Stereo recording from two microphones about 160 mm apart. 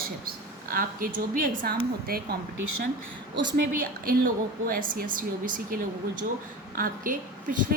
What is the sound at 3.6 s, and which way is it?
A woman's voice, 65° right (ahead or behind).